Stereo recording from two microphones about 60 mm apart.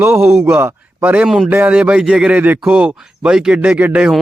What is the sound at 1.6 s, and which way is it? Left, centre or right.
Speech, right.